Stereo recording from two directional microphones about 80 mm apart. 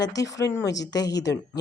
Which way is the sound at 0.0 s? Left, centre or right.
Left.